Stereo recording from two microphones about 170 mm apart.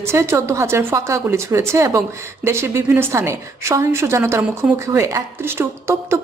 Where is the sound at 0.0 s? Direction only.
15° right (ahead or behind).